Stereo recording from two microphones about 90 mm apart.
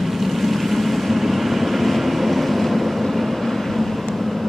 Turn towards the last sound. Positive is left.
turn(degrees=0)  # may be behind; listen again after turning